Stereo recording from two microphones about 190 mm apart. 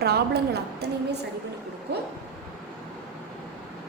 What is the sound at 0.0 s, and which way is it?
A woman's voice, 55° right (ahead or behind).